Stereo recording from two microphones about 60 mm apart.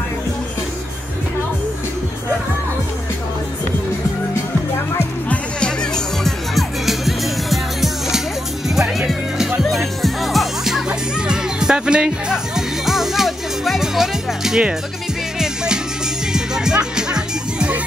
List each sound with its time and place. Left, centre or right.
5.3 s music: centre
6.2 s music: centre